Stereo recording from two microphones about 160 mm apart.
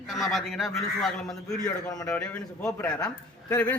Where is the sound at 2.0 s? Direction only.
5° left (ahead or behind).